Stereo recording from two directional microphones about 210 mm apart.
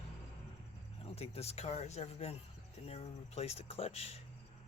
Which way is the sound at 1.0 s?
30° left (ahead or behind).